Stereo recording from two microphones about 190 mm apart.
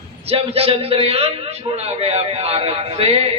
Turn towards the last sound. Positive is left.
turn(degrees=-30)  # may be behind; listen again after turning